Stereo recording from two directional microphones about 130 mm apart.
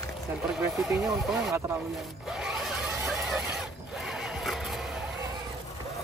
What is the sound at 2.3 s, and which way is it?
Vehicle, 5° right (ahead or behind).